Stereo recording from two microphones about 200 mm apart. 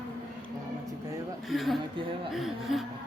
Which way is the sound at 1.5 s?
Centre (ahead or behind).